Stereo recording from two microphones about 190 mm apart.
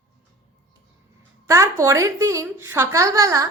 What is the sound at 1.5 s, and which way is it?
Speech, 15° right (ahead or behind).